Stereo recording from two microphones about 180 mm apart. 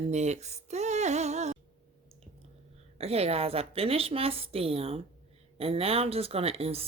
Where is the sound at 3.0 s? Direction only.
35° right (ahead or behind).